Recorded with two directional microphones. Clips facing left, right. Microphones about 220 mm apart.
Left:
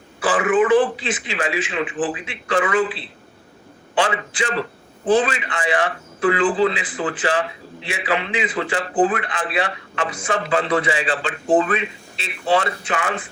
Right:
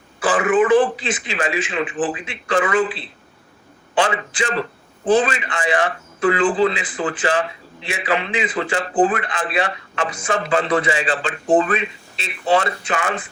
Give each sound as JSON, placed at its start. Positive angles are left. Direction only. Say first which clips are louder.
{"t": 0.3, "sound": "a sound", "louder": "right 1 dB", "side_deg": -30}
{"t": 0.7, "sound": "a man's voice", "louder": "right 1 dB", "side_deg": -45}
{"t": 3.9, "sound": "a man's voice", "louder": "right 1 dB", "side_deg": -45}